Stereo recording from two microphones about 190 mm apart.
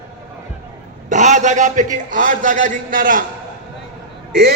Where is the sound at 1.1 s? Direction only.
40° right (ahead or behind).